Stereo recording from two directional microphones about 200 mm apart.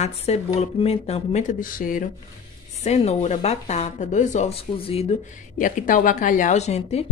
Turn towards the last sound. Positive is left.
turn(degrees=35)  # may be behind; listen again after turning